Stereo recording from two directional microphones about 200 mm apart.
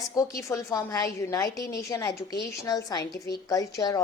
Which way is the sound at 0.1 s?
15° left (ahead or behind).